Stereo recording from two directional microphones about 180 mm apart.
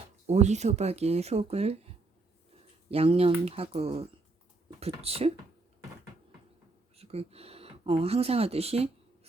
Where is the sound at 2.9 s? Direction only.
35° right (ahead or behind).